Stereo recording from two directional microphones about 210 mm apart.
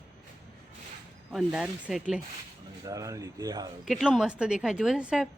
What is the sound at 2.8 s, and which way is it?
Speech, 15° right (ahead or behind).